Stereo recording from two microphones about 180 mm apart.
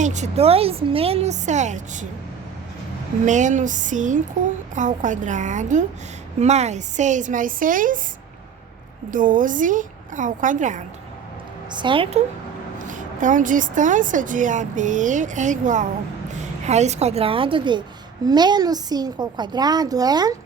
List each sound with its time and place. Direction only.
0.0 s a woman's voice: 40° right (ahead or behind)
3.2 s a woman's voice: 45° right (ahead or behind)
9.0 s a woman's voice: 45° right (ahead or behind)
11.7 s a woman's voice: 25° right (ahead or behind)
12.8 s a woman's voice: 45° right (ahead or behind); by 20.3 s 20° right (ahead or behind)